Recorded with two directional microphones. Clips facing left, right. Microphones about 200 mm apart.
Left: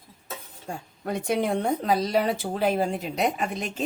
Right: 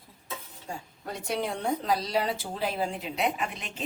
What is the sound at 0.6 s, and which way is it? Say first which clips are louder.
Speech: left 6 dB; 55° left (ahead or behind).